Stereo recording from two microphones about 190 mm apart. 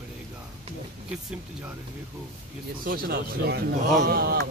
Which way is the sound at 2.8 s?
50° right (ahead or behind).